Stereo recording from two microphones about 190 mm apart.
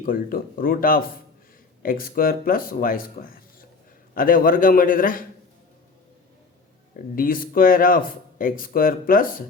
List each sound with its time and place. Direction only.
0.0 s speech: 50° left (ahead or behind)
6.9 s speech: 50° left (ahead or behind)